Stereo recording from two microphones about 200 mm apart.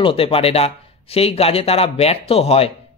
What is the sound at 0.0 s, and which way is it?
Speech, 30° left (ahead or behind).